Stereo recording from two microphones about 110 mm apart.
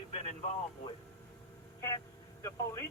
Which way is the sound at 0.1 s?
80° left.